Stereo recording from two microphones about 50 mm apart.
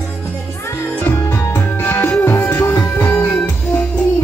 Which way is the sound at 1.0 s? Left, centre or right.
Left.